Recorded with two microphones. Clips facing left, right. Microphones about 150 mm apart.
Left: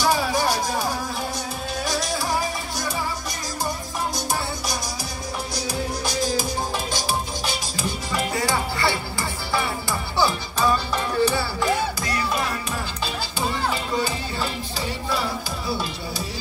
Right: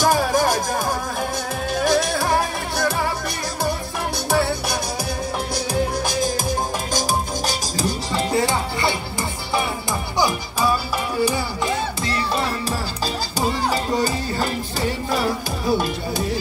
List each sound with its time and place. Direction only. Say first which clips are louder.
0.0 s music: right 3 dB; 45° right (ahead or behind)
1.9 s music: right 6 dB; 60° right (ahead or behind)
4.3 s music: right 7 dB; 65° right (ahead or behind)
6.9 s music: right 4 dB; 40° right (ahead or behind)
8.1 s music: right 3 dB; 25° right (ahead or behind)
10.1 s music: right 1 dB; 15° right (ahead or behind)
13.7 s music: right 4 dB; 45° right (ahead or behind)